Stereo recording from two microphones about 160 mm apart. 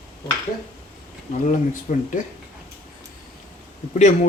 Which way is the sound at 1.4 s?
55° left (ahead or behind).